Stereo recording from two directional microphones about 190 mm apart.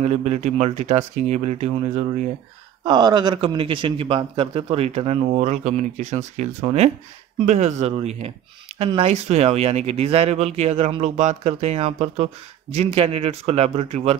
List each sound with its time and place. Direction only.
0.0 s a man's voice: 35° right (ahead or behind)
2.8 s a man's voice: 20° right (ahead or behind)